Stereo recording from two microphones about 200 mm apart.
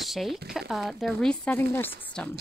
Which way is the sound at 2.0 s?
5° left (ahead or behind).